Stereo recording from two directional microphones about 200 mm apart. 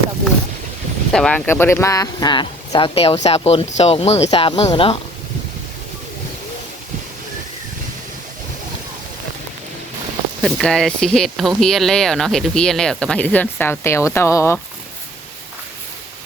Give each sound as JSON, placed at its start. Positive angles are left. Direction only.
{"t": 1.1, "sound": "speech", "side_deg": 5}
{"t": 10.4, "sound": "speech", "side_deg": 0}